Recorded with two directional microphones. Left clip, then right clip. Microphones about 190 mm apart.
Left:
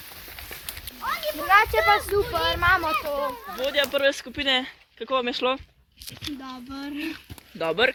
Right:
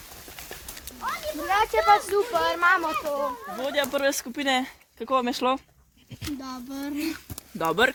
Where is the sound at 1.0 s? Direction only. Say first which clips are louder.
Left 3 dB; 30° left (ahead or behind).